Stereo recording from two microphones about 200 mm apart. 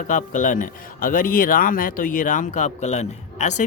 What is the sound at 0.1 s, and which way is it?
Speech, 40° left (ahead or behind).